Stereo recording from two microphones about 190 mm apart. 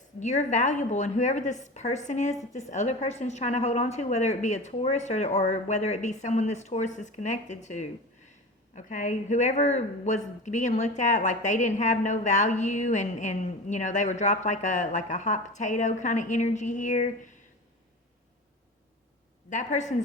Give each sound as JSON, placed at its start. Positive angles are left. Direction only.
{"t": 0.2, "sound": "speech", "side_deg": 40}
{"t": 19.5, "sound": "speech", "side_deg": 40}